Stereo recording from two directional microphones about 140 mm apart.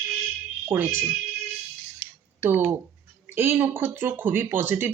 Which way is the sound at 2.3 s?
15° right (ahead or behind).